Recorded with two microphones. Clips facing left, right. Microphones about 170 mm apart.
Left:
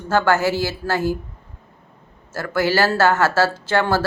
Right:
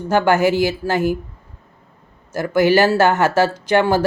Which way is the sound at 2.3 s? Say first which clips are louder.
Right 5 dB; 15° right (ahead or behind).